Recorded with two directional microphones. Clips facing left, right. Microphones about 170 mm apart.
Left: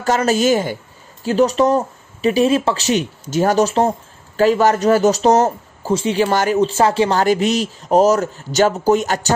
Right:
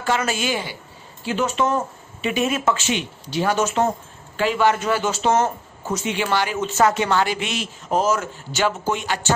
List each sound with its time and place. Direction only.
0.0 s a man's voice: 40° left (ahead or behind)